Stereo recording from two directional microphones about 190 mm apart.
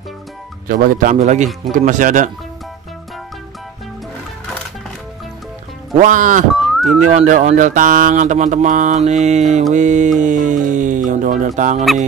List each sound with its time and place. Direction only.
0.7 s mantra: 40° right (ahead or behind)
1.7 s speech: 45° right (ahead or behind)
5.9 s speech: 45° right (ahead or behind)
6.5 s music: centre (ahead or behind)
7.1 s mantra: 40° right (ahead or behind)
9.8 s speech: 40° right (ahead or behind)